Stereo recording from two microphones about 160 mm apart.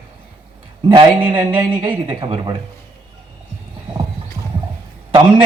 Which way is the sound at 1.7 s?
30° right (ahead or behind).